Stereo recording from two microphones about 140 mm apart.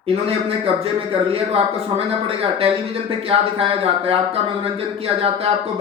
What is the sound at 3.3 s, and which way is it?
Speech, 45° right (ahead or behind).